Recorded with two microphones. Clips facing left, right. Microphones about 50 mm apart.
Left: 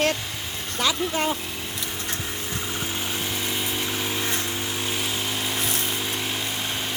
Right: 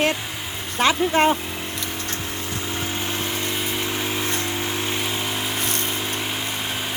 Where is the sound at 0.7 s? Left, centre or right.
Right.